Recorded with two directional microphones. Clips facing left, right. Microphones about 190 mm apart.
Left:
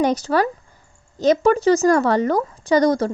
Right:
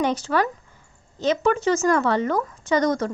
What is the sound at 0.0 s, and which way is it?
A woman's voice, 40° left (ahead or behind).